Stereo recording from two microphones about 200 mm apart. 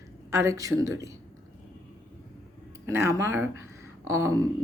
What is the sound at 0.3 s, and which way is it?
Speech, 15° right (ahead or behind).